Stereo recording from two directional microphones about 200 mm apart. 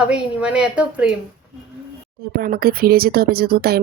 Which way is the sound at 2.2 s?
50° right (ahead or behind).